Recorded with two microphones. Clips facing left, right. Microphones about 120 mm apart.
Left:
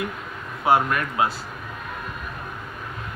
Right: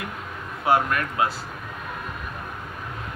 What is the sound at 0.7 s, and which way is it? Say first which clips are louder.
Speech: left 1 dB; 20° left (ahead or behind).